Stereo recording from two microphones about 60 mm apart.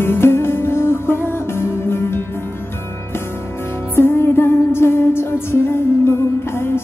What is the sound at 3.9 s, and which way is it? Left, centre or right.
Music, left.